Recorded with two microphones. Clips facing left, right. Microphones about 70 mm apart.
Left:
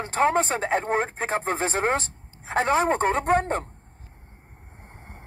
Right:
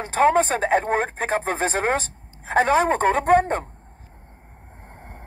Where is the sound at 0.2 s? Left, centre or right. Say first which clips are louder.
Right 4 dB; right.